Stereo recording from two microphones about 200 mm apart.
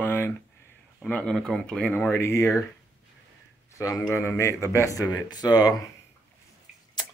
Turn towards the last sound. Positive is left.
turn(degrees=20)  # may be behind; listen again after turning